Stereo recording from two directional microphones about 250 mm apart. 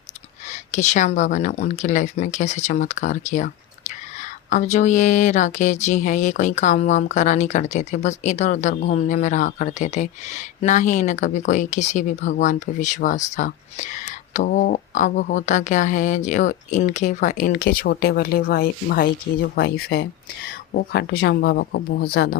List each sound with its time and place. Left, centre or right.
0.7 s speech: left